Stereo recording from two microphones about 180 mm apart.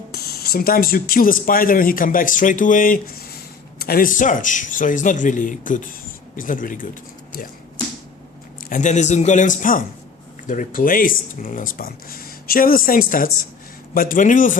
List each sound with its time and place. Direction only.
0.1 s speech: 60° left (ahead or behind)
8.7 s speech: 40° left (ahead or behind)